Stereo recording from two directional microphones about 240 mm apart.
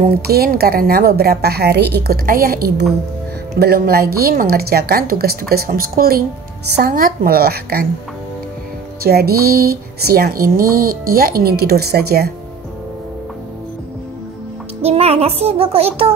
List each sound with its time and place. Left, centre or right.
0.0 s speech: right
9.0 s speech: right
14.8 s music: right